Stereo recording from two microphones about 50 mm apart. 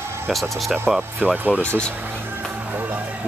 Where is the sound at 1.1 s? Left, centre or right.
Right.